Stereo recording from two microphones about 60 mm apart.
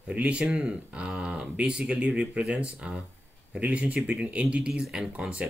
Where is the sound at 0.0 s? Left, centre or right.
Centre.